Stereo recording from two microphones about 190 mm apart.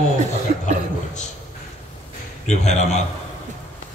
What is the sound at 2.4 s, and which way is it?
Speech, 35° left (ahead or behind).